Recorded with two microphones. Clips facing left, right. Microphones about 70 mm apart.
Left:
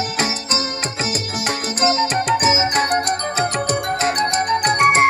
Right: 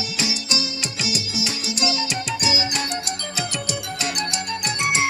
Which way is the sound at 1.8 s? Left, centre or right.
Left.